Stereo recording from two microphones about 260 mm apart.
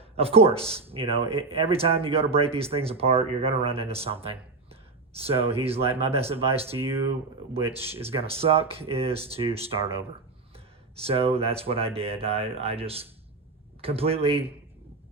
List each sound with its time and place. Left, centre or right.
0.0 s speech: right
6.7 s speech: centre
8.0 s speech: right
11.0 s speech: right